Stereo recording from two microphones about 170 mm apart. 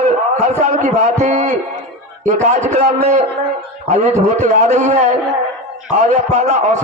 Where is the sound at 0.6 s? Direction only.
40° right (ahead or behind).